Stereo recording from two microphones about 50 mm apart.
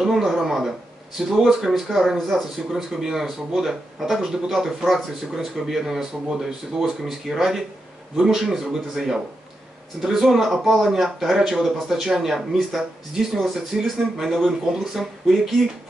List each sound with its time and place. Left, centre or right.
0.0 s speech: centre